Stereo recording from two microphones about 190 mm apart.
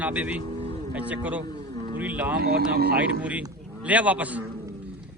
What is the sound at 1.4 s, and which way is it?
Vehicle, 25° left (ahead or behind).